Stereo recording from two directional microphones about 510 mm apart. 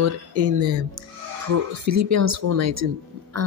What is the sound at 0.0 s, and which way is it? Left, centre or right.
A woman's voice, right.